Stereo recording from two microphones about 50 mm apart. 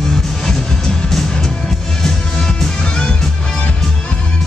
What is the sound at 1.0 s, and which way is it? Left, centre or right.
Music, centre.